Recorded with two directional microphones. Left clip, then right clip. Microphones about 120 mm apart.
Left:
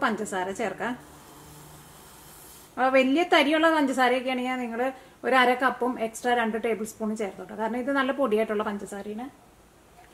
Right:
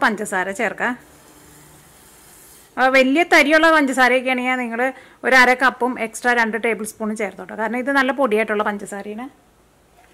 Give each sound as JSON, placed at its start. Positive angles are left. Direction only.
{"t": 0.0, "sound": "a woman's voice", "side_deg": -40}
{"t": 2.7, "sound": "a woman's voice", "side_deg": -40}